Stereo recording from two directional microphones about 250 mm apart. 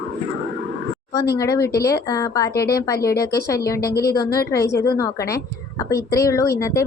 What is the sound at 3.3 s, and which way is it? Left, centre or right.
Speech, centre.